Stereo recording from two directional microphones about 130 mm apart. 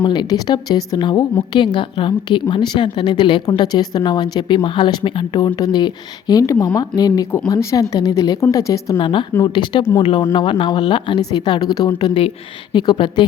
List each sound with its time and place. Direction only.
0.0 s a woman's voice: 35° left (ahead or behind)
9.0 s a woman's voice: 40° left (ahead or behind)